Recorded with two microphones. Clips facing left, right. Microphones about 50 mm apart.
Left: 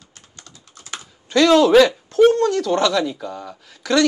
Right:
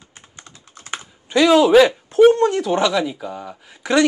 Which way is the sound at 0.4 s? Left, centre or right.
Right.